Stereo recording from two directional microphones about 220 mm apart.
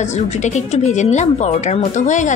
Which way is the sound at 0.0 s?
30° left (ahead or behind).